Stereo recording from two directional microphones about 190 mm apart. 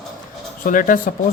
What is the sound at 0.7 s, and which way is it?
Speech, 45° left (ahead or behind).